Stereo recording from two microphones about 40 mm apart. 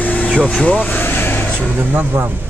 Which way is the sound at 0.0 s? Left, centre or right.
Left.